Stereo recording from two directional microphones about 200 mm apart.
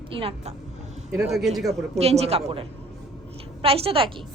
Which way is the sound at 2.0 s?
30° right (ahead or behind).